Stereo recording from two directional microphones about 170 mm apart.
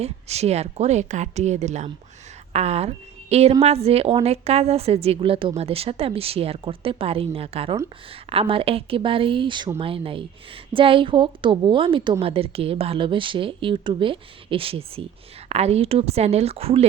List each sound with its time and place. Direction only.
0.0 s a woman's voice: 40° right (ahead or behind)